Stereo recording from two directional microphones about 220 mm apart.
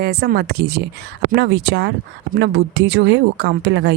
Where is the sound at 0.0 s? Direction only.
45° right (ahead or behind).